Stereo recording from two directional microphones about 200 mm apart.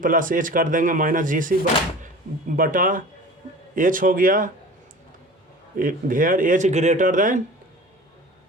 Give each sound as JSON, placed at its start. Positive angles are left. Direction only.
{"t": 0.0, "sound": "speech", "side_deg": -40}
{"t": 2.6, "sound": "speech", "side_deg": -40}
{"t": 5.7, "sound": "speech", "side_deg": -45}